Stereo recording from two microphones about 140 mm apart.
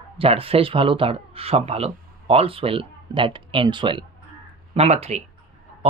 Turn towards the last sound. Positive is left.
turn(degrees=-50)  # may be behind; listen again after turning